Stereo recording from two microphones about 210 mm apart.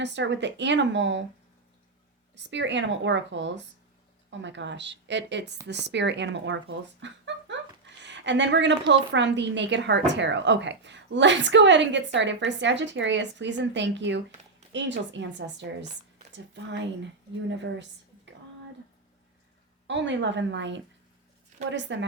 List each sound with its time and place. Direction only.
0.0 s a woman's voice: 55° right (ahead or behind)
2.3 s a woman's voice: 60° right (ahead or behind)
19.9 s a woman's voice: 60° right (ahead or behind)